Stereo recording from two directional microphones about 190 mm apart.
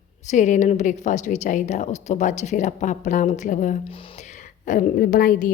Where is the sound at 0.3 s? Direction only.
40° left (ahead or behind).